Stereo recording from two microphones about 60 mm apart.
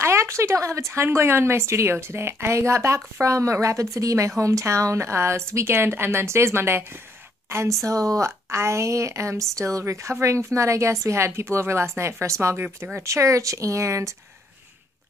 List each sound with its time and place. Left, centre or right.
0.0 s speech: right
5.7 s speech: right
12.6 s speech: right
13.0 s speech: right